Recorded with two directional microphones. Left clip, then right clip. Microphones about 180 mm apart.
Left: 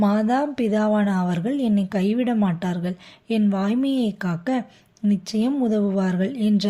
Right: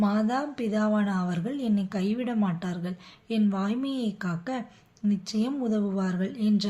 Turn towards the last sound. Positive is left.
turn(degrees=40)  # may be behind; listen again after turning